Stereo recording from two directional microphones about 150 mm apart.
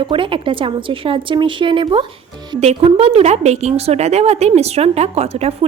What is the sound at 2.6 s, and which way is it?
A woman's voice, 45° right (ahead or behind).